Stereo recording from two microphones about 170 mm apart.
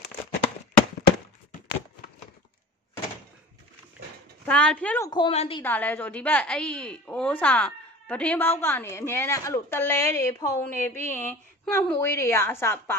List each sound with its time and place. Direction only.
4.5 s a woman's voice: 5° left (ahead or behind)
5.3 s a woman's voice: 40° left (ahead or behind)
5.6 s a woman's voice: 10° left (ahead or behind)